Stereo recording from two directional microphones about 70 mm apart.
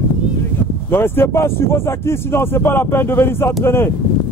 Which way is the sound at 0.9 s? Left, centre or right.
Left.